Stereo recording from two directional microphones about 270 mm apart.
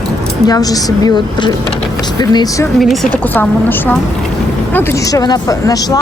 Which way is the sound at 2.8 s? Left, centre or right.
Centre.